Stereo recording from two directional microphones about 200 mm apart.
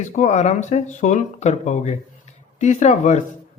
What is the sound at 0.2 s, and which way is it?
Speech, 35° left (ahead or behind).